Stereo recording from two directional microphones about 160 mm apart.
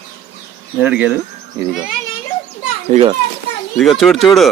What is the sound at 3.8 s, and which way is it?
Speech, centre (ahead or behind).